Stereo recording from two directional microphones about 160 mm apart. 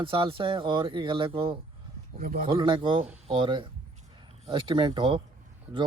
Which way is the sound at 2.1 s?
65° right (ahead or behind).